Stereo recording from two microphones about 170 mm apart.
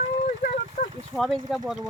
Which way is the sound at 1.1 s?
Centre (ahead or behind).